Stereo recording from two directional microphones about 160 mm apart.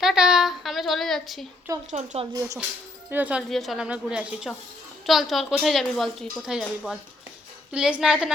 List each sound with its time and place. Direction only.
0.0 s a sound: centre (ahead or behind)
1.9 s speech: 45° right (ahead or behind)
2.3 s speech: 20° right (ahead or behind)
3.1 s a woman's voice: 10° right (ahead or behind)